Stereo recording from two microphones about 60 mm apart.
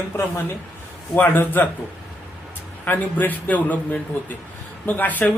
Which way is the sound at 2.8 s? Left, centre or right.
Left.